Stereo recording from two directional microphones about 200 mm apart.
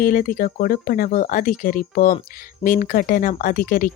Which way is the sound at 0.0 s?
45° left (ahead or behind).